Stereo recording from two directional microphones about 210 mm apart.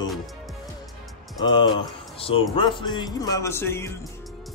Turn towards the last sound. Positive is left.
turn(degrees=10)  # may be behind; listen again after turning